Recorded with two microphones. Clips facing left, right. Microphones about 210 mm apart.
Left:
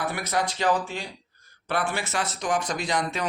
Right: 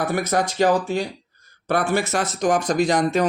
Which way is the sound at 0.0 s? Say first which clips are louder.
Right 6 dB; 45° right (ahead or behind).